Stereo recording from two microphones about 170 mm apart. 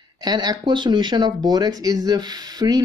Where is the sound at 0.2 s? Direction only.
25° right (ahead or behind).